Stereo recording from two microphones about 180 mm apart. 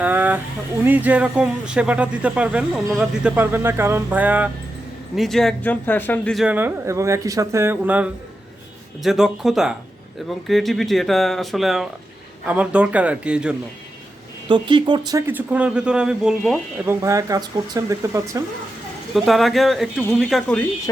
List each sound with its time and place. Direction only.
0.0 s a sound: 10° right (ahead or behind)
0.9 s speech: 10° right (ahead or behind)
14.4 s speech: 25° right (ahead or behind)
15.3 s speech: 10° right (ahead or behind)
16.8 s speech: 15° right (ahead or behind)
19.1 s speech: centre (ahead or behind)